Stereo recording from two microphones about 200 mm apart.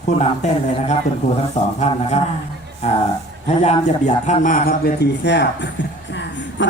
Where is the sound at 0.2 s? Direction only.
30° left (ahead or behind).